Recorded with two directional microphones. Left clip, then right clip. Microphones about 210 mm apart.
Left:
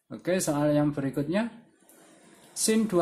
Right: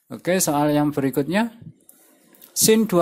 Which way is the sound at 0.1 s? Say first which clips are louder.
Right 7 dB; 35° right (ahead or behind).